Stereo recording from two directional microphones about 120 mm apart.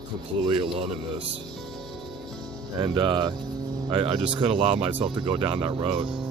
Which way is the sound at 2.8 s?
40° right (ahead or behind).